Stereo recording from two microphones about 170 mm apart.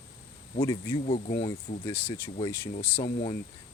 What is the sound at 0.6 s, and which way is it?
Speech, 20° left (ahead or behind).